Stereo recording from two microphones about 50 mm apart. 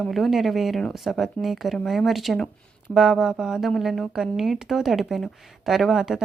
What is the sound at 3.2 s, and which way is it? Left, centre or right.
Speech, centre.